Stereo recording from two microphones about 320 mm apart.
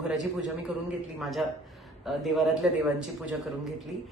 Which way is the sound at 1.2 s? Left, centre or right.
Centre.